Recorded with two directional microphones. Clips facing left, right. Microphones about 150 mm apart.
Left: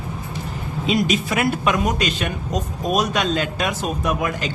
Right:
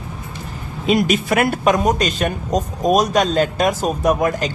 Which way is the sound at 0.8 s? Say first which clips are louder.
Right 4 dB; 50° right (ahead or behind).